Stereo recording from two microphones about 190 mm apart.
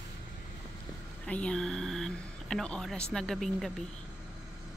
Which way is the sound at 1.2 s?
5° left (ahead or behind).